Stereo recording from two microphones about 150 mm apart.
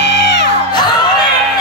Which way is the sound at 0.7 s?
30° left (ahead or behind).